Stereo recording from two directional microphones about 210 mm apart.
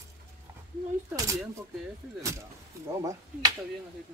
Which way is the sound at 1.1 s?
15° right (ahead or behind).